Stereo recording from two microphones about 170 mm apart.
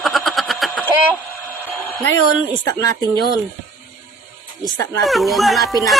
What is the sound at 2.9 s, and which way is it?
Speech, 25° right (ahead or behind).